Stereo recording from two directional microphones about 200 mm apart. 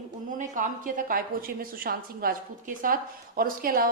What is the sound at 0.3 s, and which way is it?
A woman's voice, 40° right (ahead or behind).